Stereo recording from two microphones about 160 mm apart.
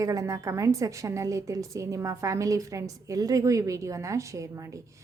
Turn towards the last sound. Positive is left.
turn(degrees=-20)  # may be behind; listen again after turning